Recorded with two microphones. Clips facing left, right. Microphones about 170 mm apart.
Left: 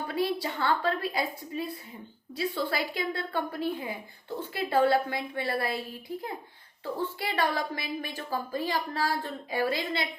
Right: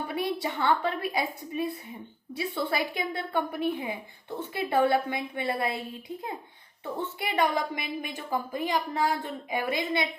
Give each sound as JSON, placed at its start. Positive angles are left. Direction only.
{"t": 0.1, "sound": "a woman's voice", "side_deg": -20}